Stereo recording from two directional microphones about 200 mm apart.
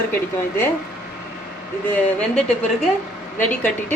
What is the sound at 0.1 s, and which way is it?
Speech, 10° left (ahead or behind).